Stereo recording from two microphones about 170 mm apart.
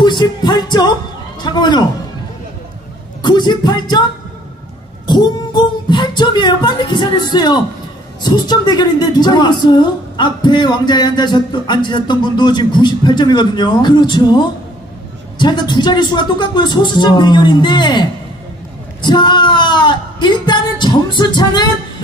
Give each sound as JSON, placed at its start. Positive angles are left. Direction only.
{"t": 0.0, "sound": "a woman's voice", "side_deg": 25}
{"t": 3.2, "sound": "a woman's voice", "side_deg": 25}
{"t": 5.0, "sound": "a woman's voice", "side_deg": 25}
{"t": 19.0, "sound": "a woman's voice", "side_deg": 25}